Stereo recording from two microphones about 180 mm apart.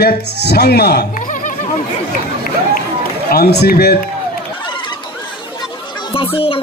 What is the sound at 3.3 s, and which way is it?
Speech, 65° left (ahead or behind).